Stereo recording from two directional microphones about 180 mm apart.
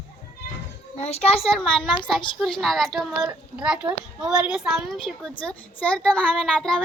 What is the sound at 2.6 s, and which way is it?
A child's voice, centre (ahead or behind).